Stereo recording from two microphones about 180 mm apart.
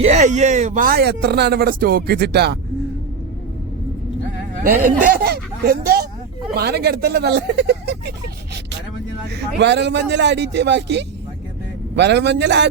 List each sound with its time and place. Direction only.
0.0 s speech: 40° right (ahead or behind); by 2.6 s 65° right (ahead or behind)
5.0 s speech: 55° right (ahead or behind)
9.6 s a man's voice: 70° right (ahead or behind)